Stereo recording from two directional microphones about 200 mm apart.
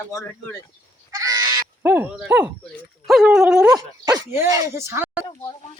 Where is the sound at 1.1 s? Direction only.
20° right (ahead or behind).